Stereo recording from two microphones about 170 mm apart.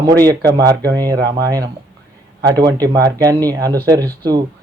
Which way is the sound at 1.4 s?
20° right (ahead or behind).